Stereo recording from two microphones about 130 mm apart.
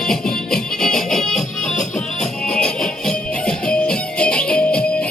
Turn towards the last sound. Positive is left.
turn(degrees=10)  # may be behind; listen again after turning